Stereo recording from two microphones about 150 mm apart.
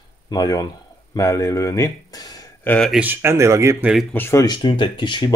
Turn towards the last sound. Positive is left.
turn(degrees=30)  # may be behind; listen again after turning